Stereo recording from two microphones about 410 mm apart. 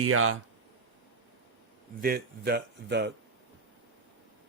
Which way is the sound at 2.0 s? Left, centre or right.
Right.